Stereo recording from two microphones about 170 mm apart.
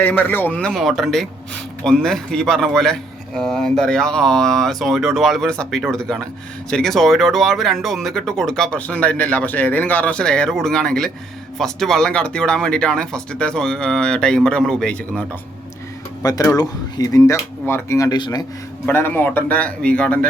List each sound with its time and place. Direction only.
0.0 s speech: 10° left (ahead or behind)
16.2 s speech: 20° left (ahead or behind)
18.9 s speech: 10° left (ahead or behind)